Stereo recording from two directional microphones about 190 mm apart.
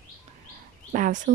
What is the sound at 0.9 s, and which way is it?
Speech, 45° right (ahead or behind).